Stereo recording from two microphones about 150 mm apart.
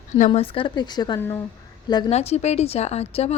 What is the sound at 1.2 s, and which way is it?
Speech, 15° left (ahead or behind).